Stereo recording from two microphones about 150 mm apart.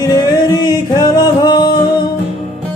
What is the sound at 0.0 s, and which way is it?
Music, 30° left (ahead or behind).